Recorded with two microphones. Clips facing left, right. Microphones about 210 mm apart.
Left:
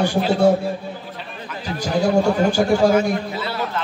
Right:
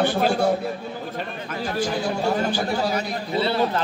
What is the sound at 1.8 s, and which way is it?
A man's voice, 45° left (ahead or behind).